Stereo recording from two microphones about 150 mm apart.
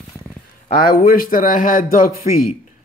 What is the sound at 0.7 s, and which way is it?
Speech, 70° left (ahead or behind).